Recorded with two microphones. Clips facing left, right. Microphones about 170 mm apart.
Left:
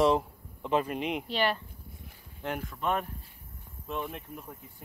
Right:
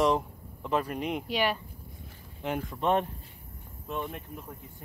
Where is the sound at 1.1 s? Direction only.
10° right (ahead or behind).